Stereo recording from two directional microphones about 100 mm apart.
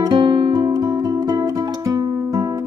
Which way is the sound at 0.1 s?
50° right (ahead or behind).